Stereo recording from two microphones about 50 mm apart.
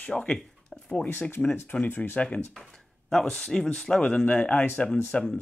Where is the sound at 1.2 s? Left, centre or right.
Left.